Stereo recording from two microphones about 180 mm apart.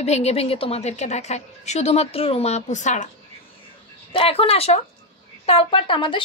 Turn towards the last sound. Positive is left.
turn(degrees=30)  # may be behind; listen again after turning